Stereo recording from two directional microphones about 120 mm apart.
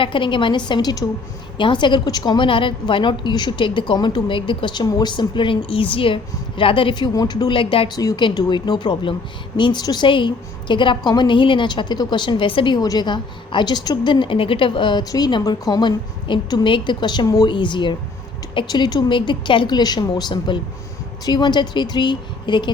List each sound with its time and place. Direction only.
0.0 s a woman's voice: 45° left (ahead or behind)
7.9 s a woman's voice: 35° left (ahead or behind)